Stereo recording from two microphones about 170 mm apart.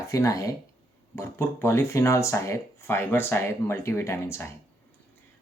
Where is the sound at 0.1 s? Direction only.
20° left (ahead or behind).